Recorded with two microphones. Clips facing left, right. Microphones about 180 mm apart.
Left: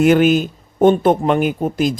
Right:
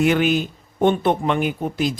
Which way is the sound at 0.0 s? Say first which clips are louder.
Left 6 dB; 45° left (ahead or behind).